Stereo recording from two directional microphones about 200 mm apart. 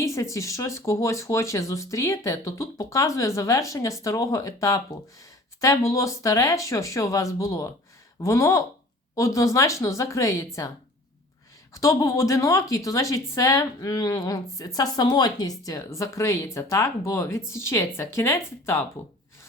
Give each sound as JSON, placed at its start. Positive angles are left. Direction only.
{"t": 0.0, "sound": "a woman's voice", "side_deg": 15}
{"t": 11.7, "sound": "a woman's voice", "side_deg": 15}